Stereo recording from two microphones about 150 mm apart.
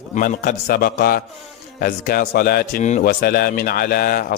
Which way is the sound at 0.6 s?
75° left (ahead or behind).